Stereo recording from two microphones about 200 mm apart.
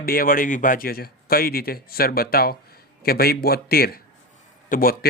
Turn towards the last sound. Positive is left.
turn(degrees=45)  # may be behind; listen again after turning